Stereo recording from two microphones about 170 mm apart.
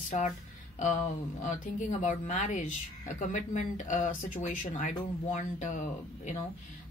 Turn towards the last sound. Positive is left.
turn(degrees=45)  # may be behind; listen again after turning